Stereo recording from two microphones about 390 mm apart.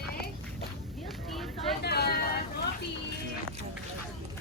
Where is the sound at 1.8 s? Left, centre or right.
Left.